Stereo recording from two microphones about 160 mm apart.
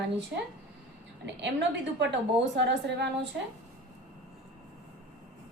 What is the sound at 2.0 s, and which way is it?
A woman's voice, 90° right.